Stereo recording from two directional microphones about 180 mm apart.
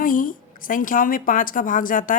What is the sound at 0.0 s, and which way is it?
A woman's voice, 50° left (ahead or behind).